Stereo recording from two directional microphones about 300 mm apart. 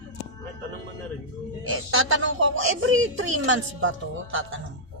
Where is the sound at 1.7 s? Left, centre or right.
Right.